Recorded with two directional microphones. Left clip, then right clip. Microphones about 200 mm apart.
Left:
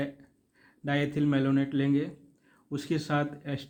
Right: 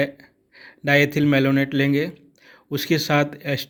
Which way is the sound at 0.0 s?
35° right (ahead or behind).